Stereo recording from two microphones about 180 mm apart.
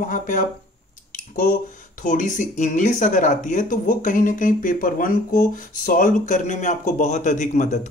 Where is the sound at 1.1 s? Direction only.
50° left (ahead or behind).